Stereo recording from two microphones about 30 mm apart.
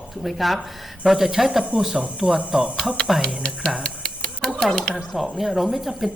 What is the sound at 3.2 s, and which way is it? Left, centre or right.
Speech, left.